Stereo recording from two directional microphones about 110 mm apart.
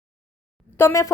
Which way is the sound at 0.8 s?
25° left (ahead or behind).